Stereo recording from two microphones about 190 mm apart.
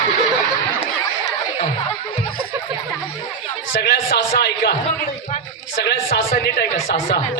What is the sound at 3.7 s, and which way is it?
Speech, 60° left (ahead or behind).